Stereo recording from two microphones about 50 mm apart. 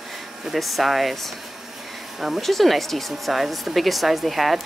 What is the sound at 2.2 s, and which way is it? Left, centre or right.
Speech, centre.